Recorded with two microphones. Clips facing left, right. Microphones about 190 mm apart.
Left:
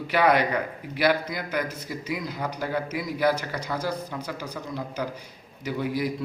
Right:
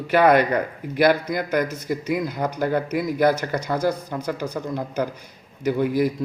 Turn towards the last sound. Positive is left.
turn(degrees=-50)  # may be behind; listen again after turning